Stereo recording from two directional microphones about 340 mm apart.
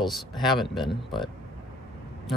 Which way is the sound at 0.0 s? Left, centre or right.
Centre.